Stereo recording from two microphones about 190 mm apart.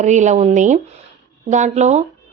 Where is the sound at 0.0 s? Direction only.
40° right (ahead or behind).